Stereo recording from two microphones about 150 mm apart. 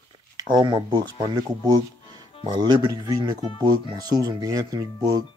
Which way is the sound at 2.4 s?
30° right (ahead or behind).